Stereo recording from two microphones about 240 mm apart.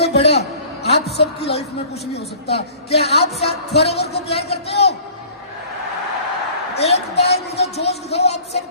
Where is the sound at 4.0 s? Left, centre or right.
Left.